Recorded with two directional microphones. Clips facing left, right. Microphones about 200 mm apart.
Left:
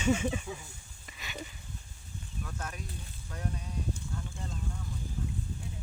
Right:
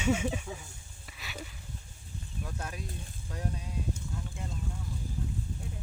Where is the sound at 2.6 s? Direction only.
30° right (ahead or behind).